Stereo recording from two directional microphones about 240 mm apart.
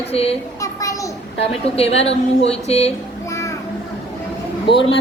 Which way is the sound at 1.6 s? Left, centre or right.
Left.